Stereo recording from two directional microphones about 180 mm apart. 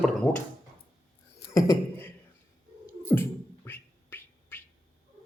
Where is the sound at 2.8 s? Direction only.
15° left (ahead or behind).